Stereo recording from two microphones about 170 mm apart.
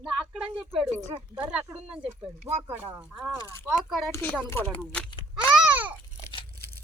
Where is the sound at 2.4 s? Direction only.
40° right (ahead or behind).